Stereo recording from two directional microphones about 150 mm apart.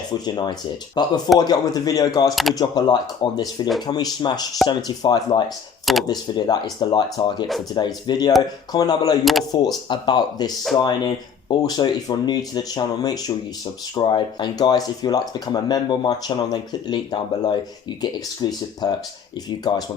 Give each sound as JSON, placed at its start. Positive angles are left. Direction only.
{"t": 0.1, "sound": "speech", "side_deg": 30}
{"t": 2.3, "sound": "speech", "side_deg": 0}
{"t": 2.6, "sound": "speech", "side_deg": 25}
{"t": 5.8, "sound": "a sound", "side_deg": 0}
{"t": 6.1, "sound": "speech", "side_deg": 30}